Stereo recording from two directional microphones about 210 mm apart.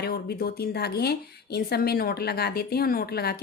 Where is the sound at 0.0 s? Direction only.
50° left (ahead or behind).